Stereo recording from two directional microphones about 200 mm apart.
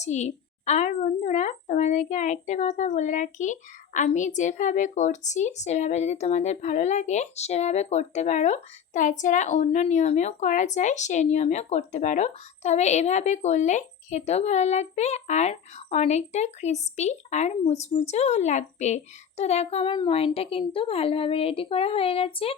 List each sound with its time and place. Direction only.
0.0 s a child's voice: 35° left (ahead or behind)